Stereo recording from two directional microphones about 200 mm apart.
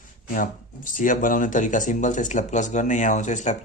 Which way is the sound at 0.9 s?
40° left (ahead or behind).